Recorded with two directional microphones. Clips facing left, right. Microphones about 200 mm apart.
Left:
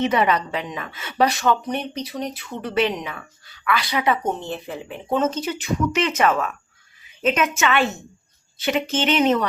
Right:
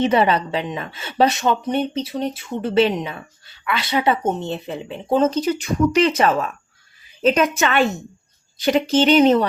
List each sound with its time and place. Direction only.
0.0 s a woman's voice: 30° right (ahead or behind)